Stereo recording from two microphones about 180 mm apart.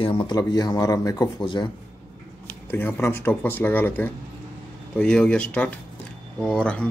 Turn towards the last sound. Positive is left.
turn(degrees=5)  # may be behind; listen again after turning